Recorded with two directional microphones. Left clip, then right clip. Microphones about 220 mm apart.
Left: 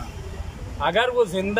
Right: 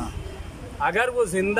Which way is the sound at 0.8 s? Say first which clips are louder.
Left 2 dB; centre (ahead or behind).